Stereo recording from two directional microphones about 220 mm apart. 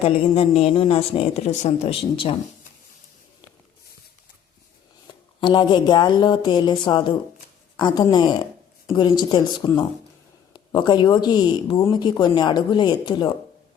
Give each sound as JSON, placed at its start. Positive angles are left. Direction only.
{"t": 0.0, "sound": "speech", "side_deg": 25}
{"t": 5.4, "sound": "speech", "side_deg": 20}